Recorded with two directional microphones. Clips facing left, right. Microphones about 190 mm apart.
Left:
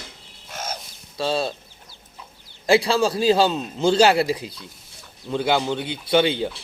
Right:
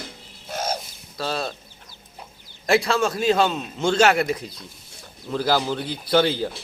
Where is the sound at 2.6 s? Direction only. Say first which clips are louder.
Left 2 dB; 30° left (ahead or behind).